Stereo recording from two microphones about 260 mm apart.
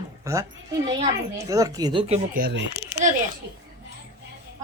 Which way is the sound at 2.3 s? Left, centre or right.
Right.